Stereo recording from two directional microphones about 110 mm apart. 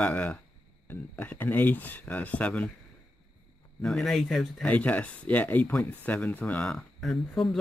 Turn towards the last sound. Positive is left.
turn(degrees=0)  # may be behind; listen again after turning